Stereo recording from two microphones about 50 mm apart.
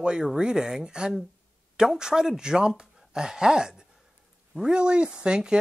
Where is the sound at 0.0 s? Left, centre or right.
Centre.